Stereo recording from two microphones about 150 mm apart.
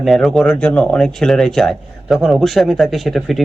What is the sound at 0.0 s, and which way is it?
Speech, centre (ahead or behind).